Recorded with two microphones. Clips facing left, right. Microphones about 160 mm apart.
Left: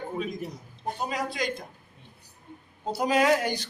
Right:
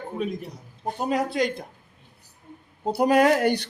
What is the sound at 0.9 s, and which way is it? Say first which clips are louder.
Speech: right 8 dB; 60° right (ahead or behind).